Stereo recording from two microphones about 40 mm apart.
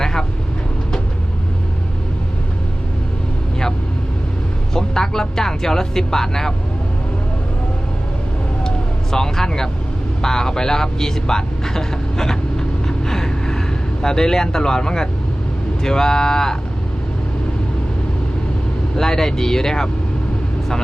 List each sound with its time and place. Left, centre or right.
0.0 s vehicle: centre
4.7 s speech: centre
9.1 s speech: centre
13.1 s vehicle: centre
14.0 s speech: centre
18.9 s speech: centre